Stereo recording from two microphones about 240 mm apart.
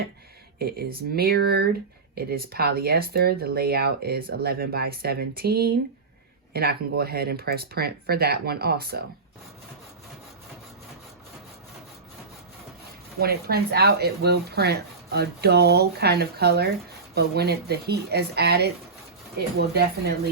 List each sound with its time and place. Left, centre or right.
0.6 s speech: right
13.1 s speech: right